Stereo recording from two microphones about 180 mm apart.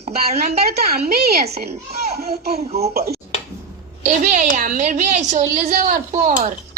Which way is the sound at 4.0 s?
40° right (ahead or behind).